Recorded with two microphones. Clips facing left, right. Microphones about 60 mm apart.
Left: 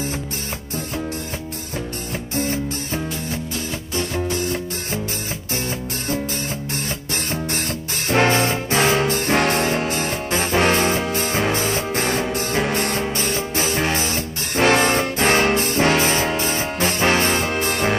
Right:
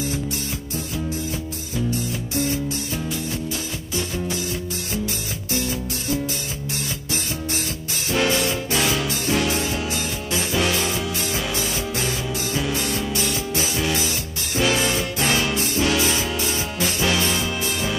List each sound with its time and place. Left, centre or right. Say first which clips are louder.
2.3 s music: left 1 dB; left
8.1 s music: left 4 dB; left